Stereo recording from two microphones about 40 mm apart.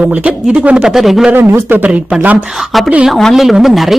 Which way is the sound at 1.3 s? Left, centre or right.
Right.